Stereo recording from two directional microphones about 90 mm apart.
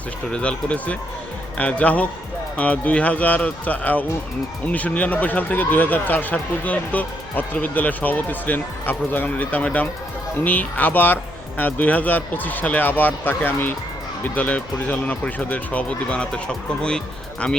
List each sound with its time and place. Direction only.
0.3 s speech: 10° left (ahead or behind)